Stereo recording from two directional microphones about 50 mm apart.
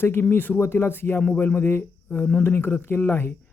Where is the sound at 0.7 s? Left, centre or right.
Left.